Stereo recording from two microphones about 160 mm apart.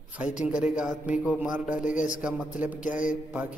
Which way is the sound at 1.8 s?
50° left (ahead or behind).